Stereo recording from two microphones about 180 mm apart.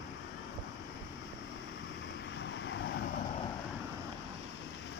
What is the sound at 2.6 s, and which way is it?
Vehicle, 90° left.